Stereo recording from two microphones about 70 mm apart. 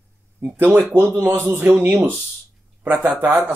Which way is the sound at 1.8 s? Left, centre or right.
Right.